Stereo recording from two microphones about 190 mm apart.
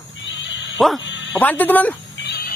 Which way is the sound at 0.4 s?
75° left (ahead or behind).